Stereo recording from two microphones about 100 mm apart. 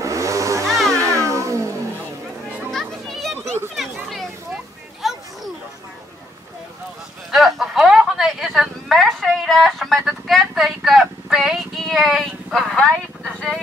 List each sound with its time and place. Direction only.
0.0 s vehicle: 30° right (ahead or behind)
0.7 s music: centre (ahead or behind)
1.0 s music: 30° right (ahead or behind)
2.7 s children playing: centre (ahead or behind)
4.1 s a sound: centre (ahead or behind)
7.2 s a sound: centre (ahead or behind)